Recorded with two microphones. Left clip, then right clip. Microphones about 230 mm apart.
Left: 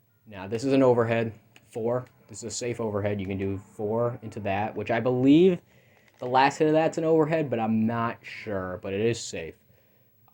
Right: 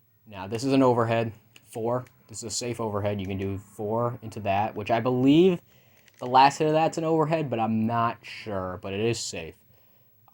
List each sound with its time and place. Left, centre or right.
0.3 s speech: right